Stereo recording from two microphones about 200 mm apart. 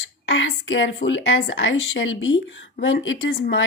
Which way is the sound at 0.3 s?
75° left (ahead or behind).